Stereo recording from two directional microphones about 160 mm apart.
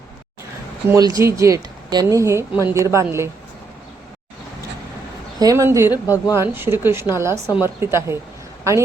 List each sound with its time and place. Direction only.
0.9 s speech: 25° right (ahead or behind)
5.4 s speech: 20° right (ahead or behind)